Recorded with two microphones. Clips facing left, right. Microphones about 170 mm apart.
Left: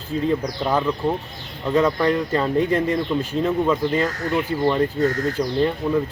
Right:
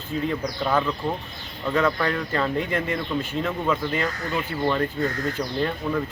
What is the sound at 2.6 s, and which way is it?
Speech, 35° left (ahead or behind).